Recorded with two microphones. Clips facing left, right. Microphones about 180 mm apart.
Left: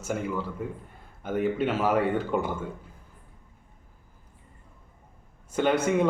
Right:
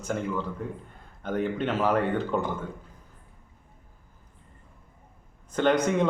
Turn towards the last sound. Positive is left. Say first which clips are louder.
# even
turn(degrees=5)  # may be behind; listen again after turning